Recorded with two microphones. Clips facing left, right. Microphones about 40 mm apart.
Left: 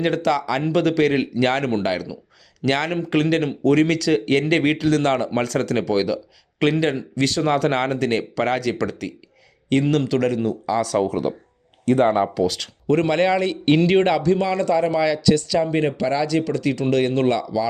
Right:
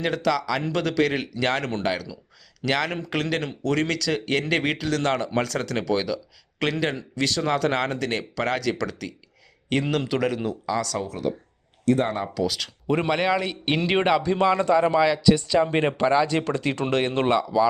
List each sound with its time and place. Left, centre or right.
0.0 s speech: centre
9.6 s speech: centre
10.7 s speech: centre
11.1 s speech: left
12.5 s speech: centre
15.4 s speech: right